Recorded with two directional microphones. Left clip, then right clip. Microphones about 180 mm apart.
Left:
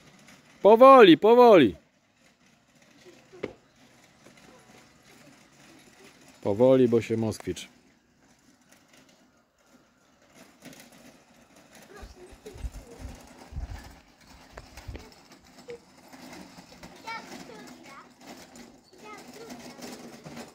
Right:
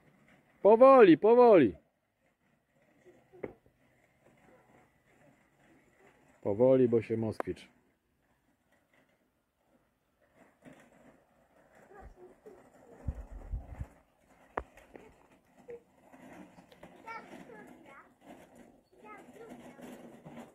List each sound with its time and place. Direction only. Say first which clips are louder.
0.6 s speech: left 6 dB; 5° left (ahead or behind)
6.4 s speech: left 5 dB; 5° left (ahead or behind)
14.9 s a sound: left 5 dB; 90° left